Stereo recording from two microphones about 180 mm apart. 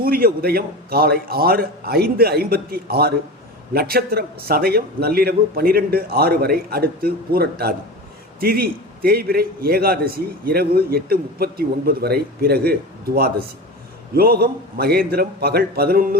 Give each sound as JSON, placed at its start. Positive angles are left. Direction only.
{"t": 0.0, "sound": "a man's voice", "side_deg": -55}
{"t": 14.2, "sound": "a man's voice", "side_deg": -55}